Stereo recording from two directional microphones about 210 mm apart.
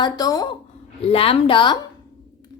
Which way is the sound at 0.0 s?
20° left (ahead or behind).